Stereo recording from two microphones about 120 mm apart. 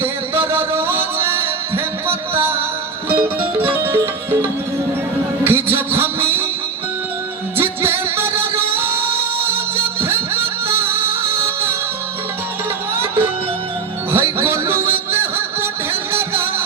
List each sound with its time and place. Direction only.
0.0 s music: 20° right (ahead or behind)
5.4 s music: 20° right (ahead or behind)
7.5 s music: 20° right (ahead or behind)
13.0 s music: 20° right (ahead or behind)